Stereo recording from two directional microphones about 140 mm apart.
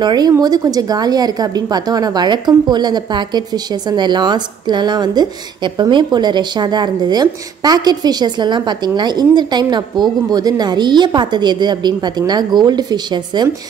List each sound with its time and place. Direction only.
0.0 s a woman's voice: 30° right (ahead or behind)